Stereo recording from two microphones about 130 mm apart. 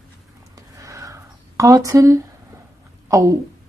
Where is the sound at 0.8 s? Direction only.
25° right (ahead or behind).